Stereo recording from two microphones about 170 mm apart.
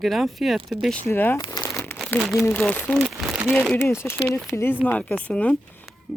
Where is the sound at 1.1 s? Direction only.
15° left (ahead or behind).